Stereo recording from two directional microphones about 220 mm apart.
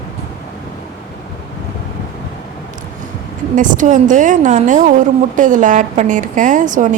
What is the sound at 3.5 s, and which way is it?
A woman's voice, 35° right (ahead or behind).